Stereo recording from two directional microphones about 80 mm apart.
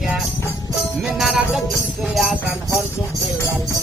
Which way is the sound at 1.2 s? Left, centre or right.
Centre.